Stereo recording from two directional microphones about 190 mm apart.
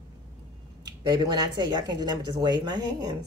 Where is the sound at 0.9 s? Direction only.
20° right (ahead or behind).